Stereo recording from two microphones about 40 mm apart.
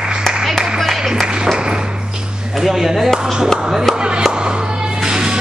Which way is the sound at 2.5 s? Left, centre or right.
Centre.